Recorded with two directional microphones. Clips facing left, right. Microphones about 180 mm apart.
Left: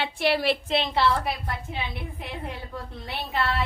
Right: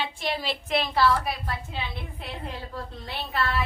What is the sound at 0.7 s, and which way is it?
Speech, 25° left (ahead or behind).